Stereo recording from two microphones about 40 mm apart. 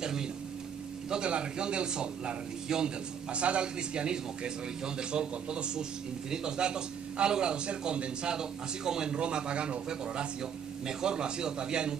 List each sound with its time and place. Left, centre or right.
0.0 s a sound: centre
1.1 s a man's voice: right
2.7 s a man's voice: centre
3.3 s a man's voice: right